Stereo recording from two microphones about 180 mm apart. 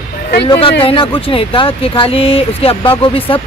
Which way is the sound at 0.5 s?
30° left (ahead or behind).